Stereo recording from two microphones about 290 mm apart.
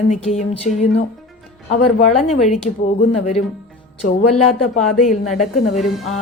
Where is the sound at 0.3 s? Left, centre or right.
Left.